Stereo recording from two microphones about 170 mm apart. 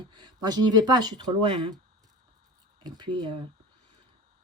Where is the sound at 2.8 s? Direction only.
25° right (ahead or behind).